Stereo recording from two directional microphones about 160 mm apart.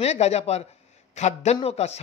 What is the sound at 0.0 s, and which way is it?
Speech, 45° left (ahead or behind).